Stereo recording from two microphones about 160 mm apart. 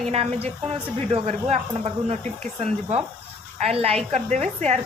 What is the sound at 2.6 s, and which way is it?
A woman's voice, 45° right (ahead or behind).